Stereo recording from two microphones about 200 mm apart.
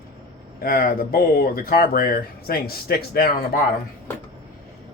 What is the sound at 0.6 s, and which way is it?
Speech, 45° left (ahead or behind).